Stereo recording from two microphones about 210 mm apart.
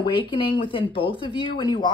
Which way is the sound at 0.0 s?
25° left (ahead or behind).